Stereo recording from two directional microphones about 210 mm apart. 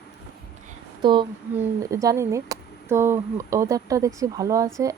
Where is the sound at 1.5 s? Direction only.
15° right (ahead or behind).